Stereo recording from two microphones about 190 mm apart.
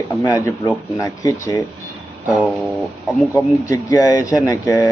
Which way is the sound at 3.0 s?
10° left (ahead or behind).